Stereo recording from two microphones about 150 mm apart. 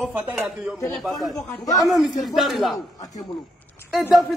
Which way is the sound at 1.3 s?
25° left (ahead or behind).